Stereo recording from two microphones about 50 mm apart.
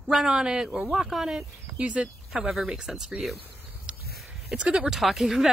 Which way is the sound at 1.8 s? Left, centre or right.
Right.